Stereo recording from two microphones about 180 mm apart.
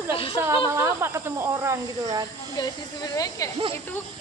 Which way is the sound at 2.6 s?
20° left (ahead or behind).